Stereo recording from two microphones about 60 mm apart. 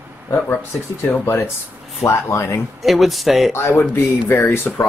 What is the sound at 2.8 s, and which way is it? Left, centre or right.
Speech, centre.